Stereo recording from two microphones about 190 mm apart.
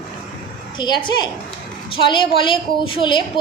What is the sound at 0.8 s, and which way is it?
A woman's voice, 25° left (ahead or behind).